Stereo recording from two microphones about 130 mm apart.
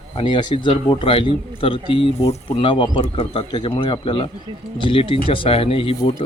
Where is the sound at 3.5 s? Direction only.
40° left (ahead or behind).